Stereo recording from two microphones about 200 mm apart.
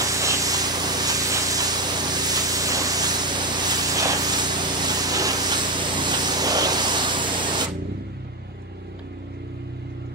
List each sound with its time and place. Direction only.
0.0 s spray: 15° right (ahead or behind)